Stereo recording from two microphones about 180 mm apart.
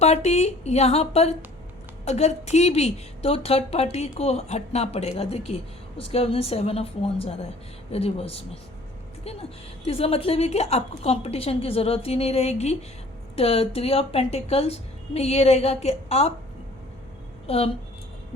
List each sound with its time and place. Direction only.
0.0 s a woman's voice: 35° left (ahead or behind)
17.4 s speech: 35° left (ahead or behind)